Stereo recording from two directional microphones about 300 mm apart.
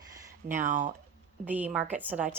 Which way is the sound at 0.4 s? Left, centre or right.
Right.